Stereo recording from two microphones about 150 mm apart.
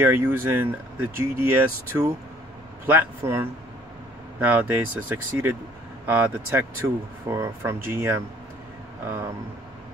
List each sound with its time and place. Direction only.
0.0 s speech: 15° right (ahead or behind)